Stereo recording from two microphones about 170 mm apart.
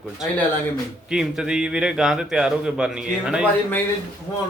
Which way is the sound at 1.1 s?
5° right (ahead or behind).